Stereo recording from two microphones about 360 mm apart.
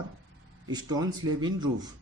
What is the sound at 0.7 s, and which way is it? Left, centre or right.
Speech, centre.